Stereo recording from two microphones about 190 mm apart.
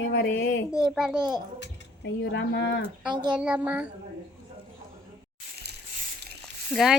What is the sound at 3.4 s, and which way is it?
Child singing, 5° right (ahead or behind).